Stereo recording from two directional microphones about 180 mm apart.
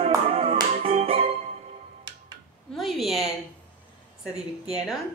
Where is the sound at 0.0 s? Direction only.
30° right (ahead or behind).